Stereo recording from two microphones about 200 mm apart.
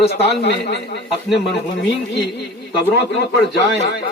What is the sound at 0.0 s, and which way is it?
Speech, 55° left (ahead or behind).